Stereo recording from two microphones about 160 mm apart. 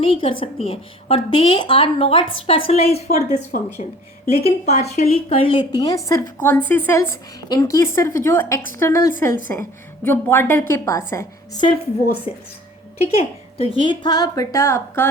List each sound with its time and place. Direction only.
0.0 s a woman's voice: 35° left (ahead or behind)
3.5 s speech: 65° left (ahead or behind)
4.3 s a woman's voice: 40° left (ahead or behind); by 11.6 s 20° left (ahead or behind)
13.6 s a woman's voice: 35° left (ahead or behind); by 15.1 s 15° left (ahead or behind)